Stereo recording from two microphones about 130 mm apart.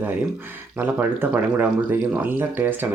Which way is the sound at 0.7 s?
15° right (ahead or behind).